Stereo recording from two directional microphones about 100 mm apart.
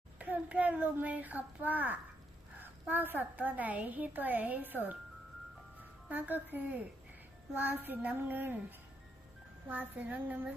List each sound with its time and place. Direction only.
0.2 s a child's voice: 15° right (ahead or behind)
6.1 s a woman's voice: 15° right (ahead or behind)
7.5 s child singing: 15° right (ahead or behind)
9.6 s a woman's voice: 15° right (ahead or behind)